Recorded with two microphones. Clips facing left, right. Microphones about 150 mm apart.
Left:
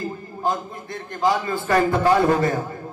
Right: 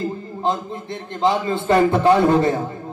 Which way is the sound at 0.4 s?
25° right (ahead or behind).